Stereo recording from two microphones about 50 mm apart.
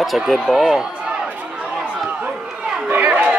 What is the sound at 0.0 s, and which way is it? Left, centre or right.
Speech, centre.